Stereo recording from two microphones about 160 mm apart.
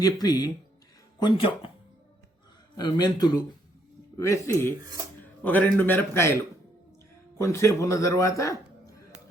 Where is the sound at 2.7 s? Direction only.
25° left (ahead or behind).